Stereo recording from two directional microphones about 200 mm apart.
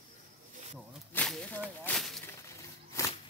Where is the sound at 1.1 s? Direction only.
5° left (ahead or behind).